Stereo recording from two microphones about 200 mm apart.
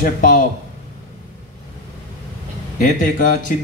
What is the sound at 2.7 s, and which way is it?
Speech, 40° left (ahead or behind).